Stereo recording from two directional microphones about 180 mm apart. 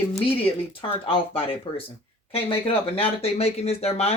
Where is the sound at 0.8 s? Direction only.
30° left (ahead or behind).